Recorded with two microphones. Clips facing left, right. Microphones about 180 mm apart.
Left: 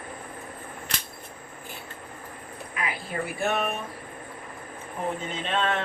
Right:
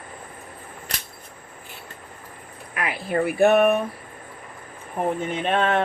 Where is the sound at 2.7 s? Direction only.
65° right (ahead or behind).